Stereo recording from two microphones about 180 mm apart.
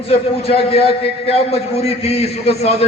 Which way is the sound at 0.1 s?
30° left (ahead or behind).